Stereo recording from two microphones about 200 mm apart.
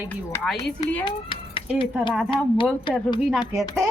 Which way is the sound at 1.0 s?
25° left (ahead or behind).